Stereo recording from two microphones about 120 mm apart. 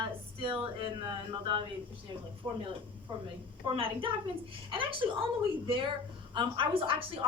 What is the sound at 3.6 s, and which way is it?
A woman's voice, 45° right (ahead or behind).